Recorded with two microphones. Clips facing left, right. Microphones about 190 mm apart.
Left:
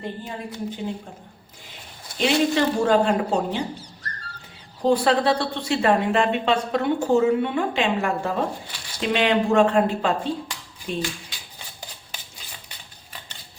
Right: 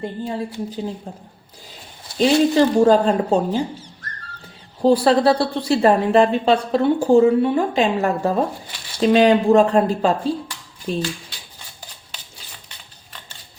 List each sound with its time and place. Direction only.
2.1 s a woman's voice: 35° right (ahead or behind)
4.8 s a woman's voice: 35° right (ahead or behind)